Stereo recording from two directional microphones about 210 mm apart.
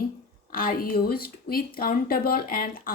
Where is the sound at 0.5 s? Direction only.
45° left (ahead or behind).